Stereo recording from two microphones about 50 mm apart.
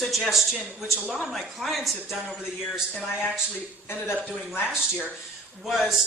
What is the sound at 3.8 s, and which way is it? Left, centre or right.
Speech, left.